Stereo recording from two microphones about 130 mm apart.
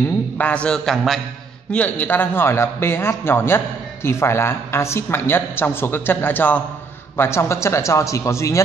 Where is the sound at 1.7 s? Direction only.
10° left (ahead or behind).